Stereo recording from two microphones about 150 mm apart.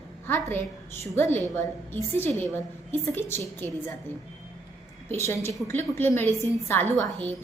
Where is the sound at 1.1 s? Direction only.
15° left (ahead or behind).